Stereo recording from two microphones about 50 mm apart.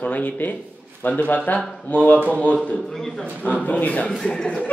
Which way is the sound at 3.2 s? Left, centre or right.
Left.